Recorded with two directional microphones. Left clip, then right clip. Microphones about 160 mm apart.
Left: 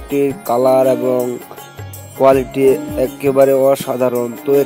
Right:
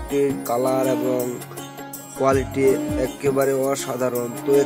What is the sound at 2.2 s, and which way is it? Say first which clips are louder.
Speech: left 8 dB; 25° left (ahead or behind).